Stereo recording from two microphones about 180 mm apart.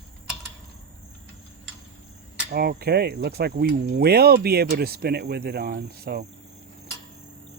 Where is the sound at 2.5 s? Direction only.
60° right (ahead or behind).